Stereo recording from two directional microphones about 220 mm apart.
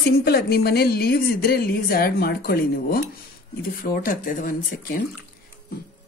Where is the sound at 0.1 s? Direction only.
45° left (ahead or behind).